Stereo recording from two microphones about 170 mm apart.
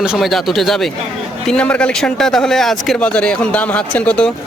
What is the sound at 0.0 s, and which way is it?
Speech, centre (ahead or behind).